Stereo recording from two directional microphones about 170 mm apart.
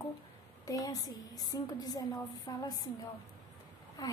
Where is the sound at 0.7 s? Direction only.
20° left (ahead or behind).